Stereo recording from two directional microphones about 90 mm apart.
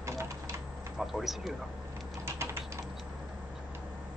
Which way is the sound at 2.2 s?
30° right (ahead or behind).